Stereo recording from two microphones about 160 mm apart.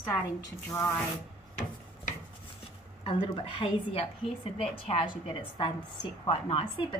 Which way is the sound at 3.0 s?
35° left (ahead or behind).